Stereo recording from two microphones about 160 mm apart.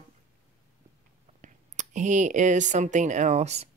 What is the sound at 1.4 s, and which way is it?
Speech, 50° right (ahead or behind).